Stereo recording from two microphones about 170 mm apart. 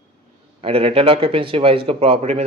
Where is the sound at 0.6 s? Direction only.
35° right (ahead or behind).